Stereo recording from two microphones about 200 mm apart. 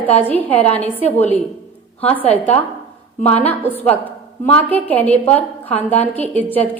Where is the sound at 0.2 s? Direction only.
10° left (ahead or behind).